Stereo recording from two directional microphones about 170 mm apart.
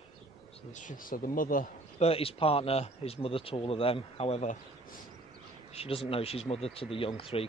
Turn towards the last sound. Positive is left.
turn(degrees=30)  # may be behind; listen again after turning